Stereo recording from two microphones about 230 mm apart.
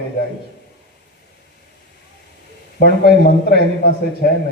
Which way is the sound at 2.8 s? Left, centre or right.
Left.